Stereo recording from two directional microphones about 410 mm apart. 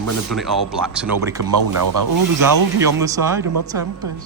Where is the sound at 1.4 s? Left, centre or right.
Right.